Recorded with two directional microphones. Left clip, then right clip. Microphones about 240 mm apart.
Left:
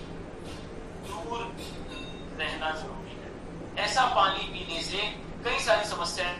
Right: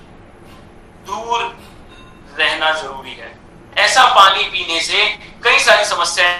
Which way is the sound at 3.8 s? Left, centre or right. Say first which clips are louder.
Right 15 dB; right.